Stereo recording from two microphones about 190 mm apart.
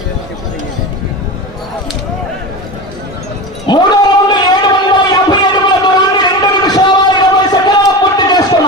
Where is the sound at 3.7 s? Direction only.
25° left (ahead or behind).